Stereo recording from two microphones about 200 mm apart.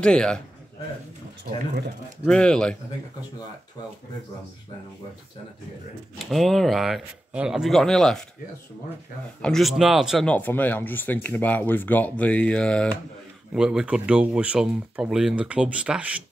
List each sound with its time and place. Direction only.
0.0 s speech: 5° left (ahead or behind)
2.2 s speech: 5° left (ahead or behind)
6.1 s speech: centre (ahead or behind)
9.4 s speech: centre (ahead or behind)